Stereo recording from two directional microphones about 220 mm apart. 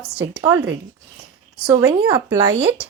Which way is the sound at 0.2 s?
5° right (ahead or behind).